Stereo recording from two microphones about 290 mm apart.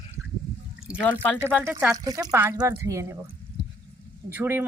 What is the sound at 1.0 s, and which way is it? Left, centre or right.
Speech, centre.